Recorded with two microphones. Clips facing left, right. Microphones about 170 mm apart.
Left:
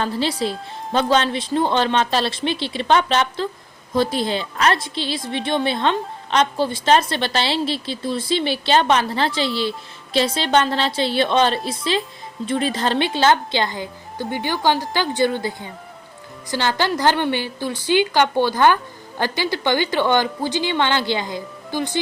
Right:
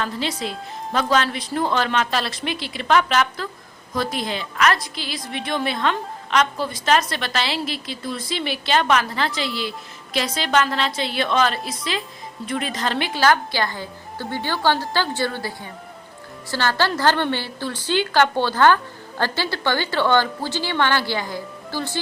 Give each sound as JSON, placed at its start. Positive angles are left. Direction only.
{"t": 0.0, "sound": "a woman's voice", "side_deg": 30}